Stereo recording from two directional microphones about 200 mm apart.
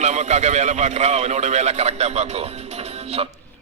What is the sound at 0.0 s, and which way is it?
A man's voice, 35° right (ahead or behind).